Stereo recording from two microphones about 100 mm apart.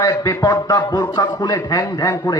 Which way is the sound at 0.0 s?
35° left (ahead or behind).